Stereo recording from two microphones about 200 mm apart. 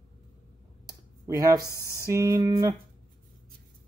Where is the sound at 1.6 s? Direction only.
15° left (ahead or behind).